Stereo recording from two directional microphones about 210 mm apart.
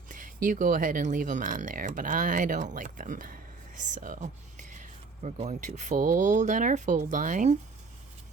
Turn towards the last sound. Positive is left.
turn(degrees=-35)  # may be behind; listen again after turning